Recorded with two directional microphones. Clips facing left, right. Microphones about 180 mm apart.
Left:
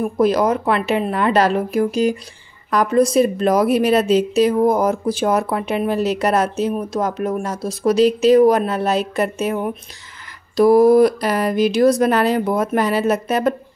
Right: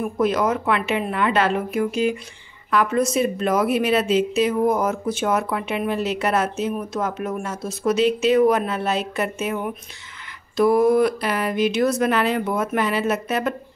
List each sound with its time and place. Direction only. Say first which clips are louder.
0.2 s a woman's voice: left 4 dB; 35° left (ahead or behind)